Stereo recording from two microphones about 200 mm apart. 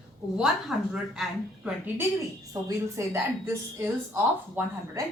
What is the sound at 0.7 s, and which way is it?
Speech, centre (ahead or behind).